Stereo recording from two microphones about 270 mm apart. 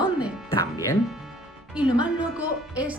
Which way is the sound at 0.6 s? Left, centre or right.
Centre.